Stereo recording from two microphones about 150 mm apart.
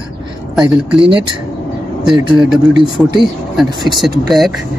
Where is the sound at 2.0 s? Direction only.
5° right (ahead or behind).